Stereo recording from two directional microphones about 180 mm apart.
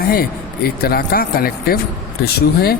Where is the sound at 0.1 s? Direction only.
60° left (ahead or behind).